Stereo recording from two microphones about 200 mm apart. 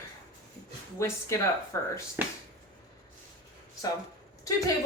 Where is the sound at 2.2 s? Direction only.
10° right (ahead or behind).